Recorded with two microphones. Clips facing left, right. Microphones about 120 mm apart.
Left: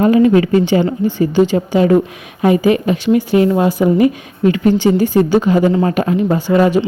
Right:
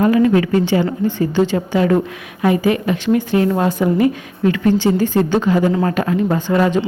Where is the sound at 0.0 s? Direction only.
20° left (ahead or behind).